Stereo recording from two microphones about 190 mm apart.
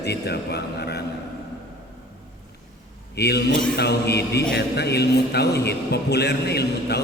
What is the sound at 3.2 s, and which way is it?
A man's voice, 60° left (ahead or behind).